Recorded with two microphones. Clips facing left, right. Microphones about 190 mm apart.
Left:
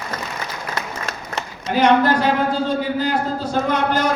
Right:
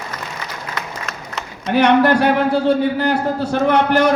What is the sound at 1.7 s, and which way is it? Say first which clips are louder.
A man's voice: right 2 dB; 65° right (ahead or behind).